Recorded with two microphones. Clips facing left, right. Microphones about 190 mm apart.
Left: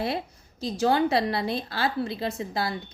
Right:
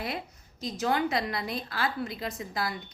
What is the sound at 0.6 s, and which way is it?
A woman's voice, 30° left (ahead or behind).